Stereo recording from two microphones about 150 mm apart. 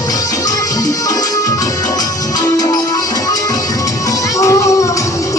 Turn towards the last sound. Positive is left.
turn(degrees=20)  # may be behind; listen again after turning